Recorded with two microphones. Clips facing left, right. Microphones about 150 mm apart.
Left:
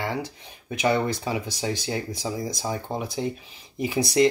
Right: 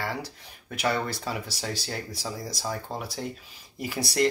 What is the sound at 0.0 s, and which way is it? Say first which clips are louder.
Speech: left 4 dB; 20° left (ahead or behind).